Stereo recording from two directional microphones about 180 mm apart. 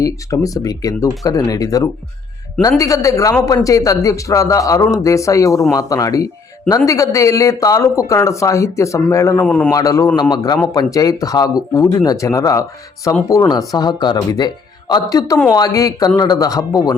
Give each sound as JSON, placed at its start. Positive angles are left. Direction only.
{"t": 0.0, "sound": "speech", "side_deg": 20}